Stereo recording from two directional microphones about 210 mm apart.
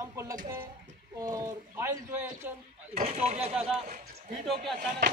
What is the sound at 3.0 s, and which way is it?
Speech, 30° right (ahead or behind).